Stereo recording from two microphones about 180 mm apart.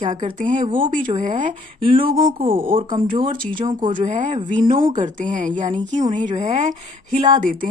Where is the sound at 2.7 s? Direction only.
30° right (ahead or behind).